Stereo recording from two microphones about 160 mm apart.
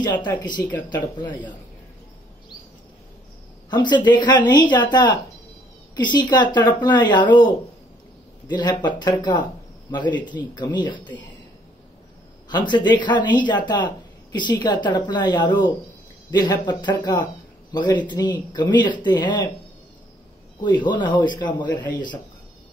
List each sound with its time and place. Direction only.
0.0 s speech: 30° left (ahead or behind)
3.7 s speech: 25° left (ahead or behind)
8.5 s speech: 25° left (ahead or behind)
12.4 s speech: 30° left (ahead or behind)
20.6 s speech: 30° left (ahead or behind)